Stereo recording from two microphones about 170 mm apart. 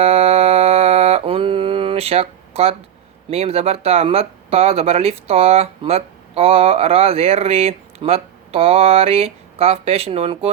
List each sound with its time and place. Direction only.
0.0 s mantra: 35° right (ahead or behind)
3.2 s speech: 35° right (ahead or behind)